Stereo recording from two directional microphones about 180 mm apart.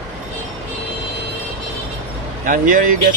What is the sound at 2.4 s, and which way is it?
Speech, 50° right (ahead or behind).